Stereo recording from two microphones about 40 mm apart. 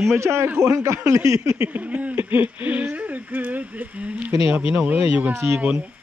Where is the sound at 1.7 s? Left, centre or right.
Right.